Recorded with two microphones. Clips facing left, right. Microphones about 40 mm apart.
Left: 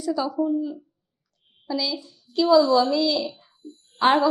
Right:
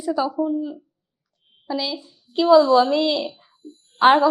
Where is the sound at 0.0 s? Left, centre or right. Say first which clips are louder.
Right 2 dB; right.